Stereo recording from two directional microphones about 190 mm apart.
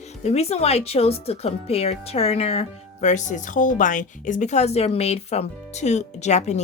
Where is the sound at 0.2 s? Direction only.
35° left (ahead or behind).